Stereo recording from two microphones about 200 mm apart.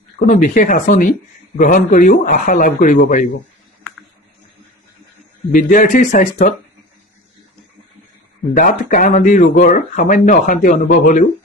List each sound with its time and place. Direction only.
0.2 s speech: 40° left (ahead or behind)
5.5 s speech: 40° left (ahead or behind)
8.5 s speech: 40° left (ahead or behind)